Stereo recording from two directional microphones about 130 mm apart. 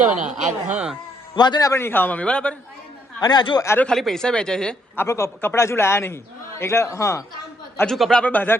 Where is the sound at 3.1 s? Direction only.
35° left (ahead or behind).